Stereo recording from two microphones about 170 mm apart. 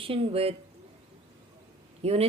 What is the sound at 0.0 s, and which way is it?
Speech, 30° right (ahead or behind).